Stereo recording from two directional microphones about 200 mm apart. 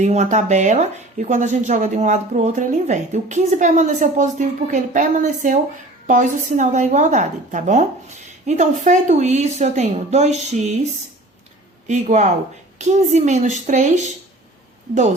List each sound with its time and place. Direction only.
0.0 s speech: 35° right (ahead or behind)
11.9 s speech: 35° right (ahead or behind)